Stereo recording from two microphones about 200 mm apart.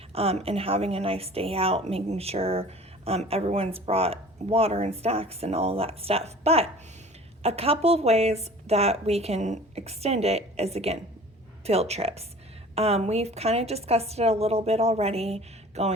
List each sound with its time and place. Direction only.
0.1 s a woman's voice: 30° right (ahead or behind)